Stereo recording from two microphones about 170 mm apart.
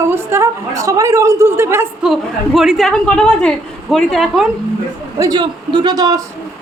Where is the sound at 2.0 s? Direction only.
Centre (ahead or behind).